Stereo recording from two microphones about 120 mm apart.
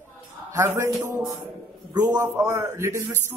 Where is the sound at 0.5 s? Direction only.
20° right (ahead or behind).